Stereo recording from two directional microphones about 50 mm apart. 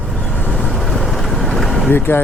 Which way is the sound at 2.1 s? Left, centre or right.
Left.